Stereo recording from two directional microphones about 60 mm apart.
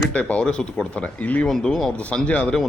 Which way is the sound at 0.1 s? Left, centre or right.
Left.